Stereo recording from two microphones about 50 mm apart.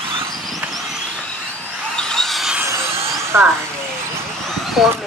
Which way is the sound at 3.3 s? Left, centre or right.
Right.